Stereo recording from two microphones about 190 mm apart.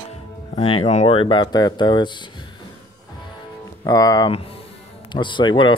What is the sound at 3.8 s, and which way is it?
Speech, 20° left (ahead or behind).